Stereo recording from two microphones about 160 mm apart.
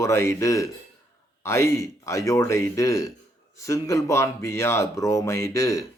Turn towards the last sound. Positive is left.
turn(degrees=20)  # may be behind; listen again after turning